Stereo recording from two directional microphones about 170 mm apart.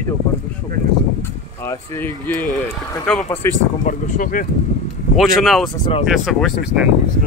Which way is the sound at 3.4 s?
15° left (ahead or behind).